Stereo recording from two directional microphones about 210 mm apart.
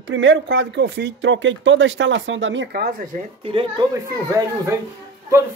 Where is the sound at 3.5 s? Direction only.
25° right (ahead or behind).